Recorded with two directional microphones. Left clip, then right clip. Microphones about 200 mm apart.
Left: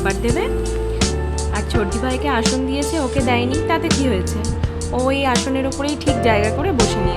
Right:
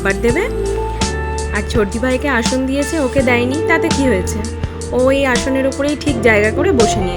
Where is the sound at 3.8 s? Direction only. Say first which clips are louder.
Right 4 dB; centre (ahead or behind).